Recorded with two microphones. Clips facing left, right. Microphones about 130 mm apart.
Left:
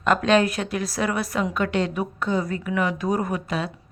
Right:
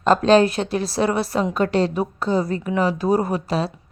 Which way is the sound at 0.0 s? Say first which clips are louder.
Right 4 dB; 30° right (ahead or behind).